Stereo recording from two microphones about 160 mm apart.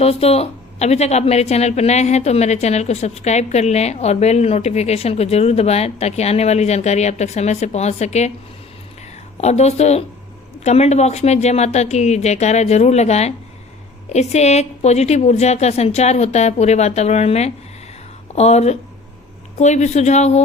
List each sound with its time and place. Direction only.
0.0 s a woman's voice: 40° left (ahead or behind)
9.4 s a woman's voice: 45° left (ahead or behind)